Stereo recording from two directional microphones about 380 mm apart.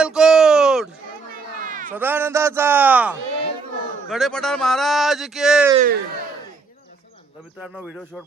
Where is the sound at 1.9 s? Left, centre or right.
Centre.